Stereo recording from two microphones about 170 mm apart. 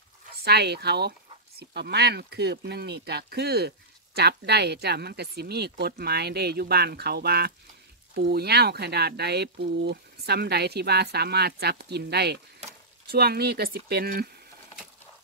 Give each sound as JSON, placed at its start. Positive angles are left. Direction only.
{"t": 0.4, "sound": "speech", "side_deg": -70}